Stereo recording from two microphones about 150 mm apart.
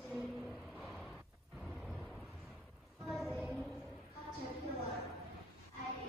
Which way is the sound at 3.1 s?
Centre (ahead or behind).